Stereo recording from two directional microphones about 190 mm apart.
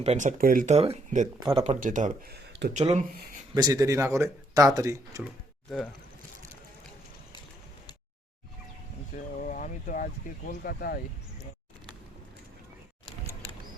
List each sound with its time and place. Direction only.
0.0 s speech: 35° right (ahead or behind)
2.3 s a sound: 60° right (ahead or behind)
2.7 s speech: 35° right (ahead or behind)
3.5 s speech: 20° right (ahead or behind)
9.1 s speech: 40° left (ahead or behind)